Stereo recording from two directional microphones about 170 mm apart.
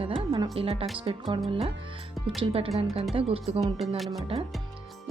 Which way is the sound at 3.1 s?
35° right (ahead or behind).